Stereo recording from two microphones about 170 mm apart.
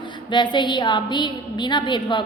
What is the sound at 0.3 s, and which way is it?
A woman's voice, 25° left (ahead or behind).